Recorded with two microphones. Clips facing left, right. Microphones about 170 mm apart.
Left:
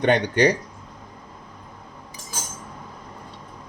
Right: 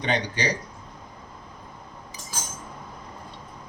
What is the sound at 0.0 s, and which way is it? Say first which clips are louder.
Speech: left 8 dB; 55° left (ahead or behind).